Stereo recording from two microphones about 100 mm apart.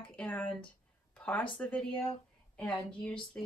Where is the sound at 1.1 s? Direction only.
15° left (ahead or behind).